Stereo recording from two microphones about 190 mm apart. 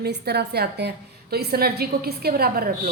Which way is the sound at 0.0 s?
60° right (ahead or behind).